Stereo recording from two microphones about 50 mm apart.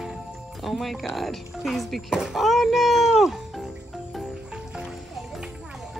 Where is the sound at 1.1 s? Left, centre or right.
Centre.